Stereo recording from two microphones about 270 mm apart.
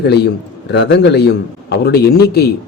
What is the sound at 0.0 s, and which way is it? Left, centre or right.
Speech, left.